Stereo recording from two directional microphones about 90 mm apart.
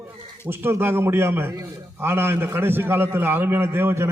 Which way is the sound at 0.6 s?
25° right (ahead or behind).